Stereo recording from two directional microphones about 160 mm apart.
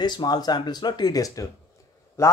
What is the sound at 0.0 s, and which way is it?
Speech, 25° left (ahead or behind).